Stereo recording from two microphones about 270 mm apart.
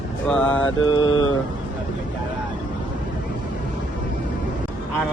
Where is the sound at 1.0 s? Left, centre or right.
Left.